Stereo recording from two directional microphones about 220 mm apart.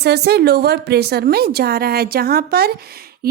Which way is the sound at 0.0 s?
50° right (ahead or behind).